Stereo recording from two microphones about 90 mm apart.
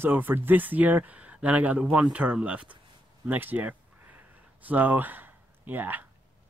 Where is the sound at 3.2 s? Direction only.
20° right (ahead or behind).